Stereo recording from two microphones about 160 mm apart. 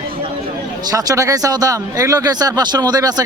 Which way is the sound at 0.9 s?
20° right (ahead or behind).